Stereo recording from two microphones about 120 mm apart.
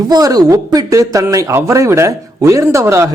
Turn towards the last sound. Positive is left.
turn(degrees=-25)  # may be behind; listen again after turning